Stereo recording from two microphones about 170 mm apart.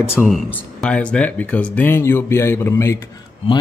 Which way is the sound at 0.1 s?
Centre (ahead or behind).